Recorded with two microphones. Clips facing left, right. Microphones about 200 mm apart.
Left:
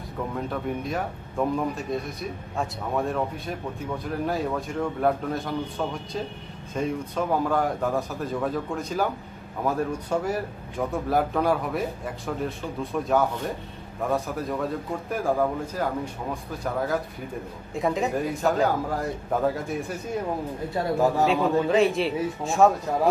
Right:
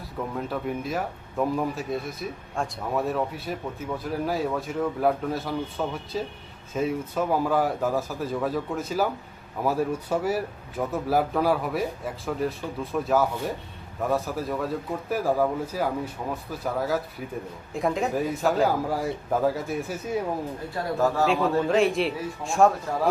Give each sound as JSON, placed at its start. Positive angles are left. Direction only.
{"t": 0.3, "sound": "speech", "side_deg": -5}
{"t": 20.7, "sound": "a man's voice", "side_deg": 15}
{"t": 21.6, "sound": "speech", "side_deg": 0}